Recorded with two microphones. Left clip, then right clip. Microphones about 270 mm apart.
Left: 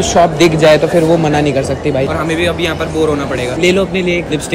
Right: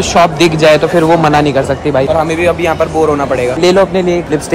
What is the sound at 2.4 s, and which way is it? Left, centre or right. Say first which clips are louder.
Speech: right 4 dB; centre.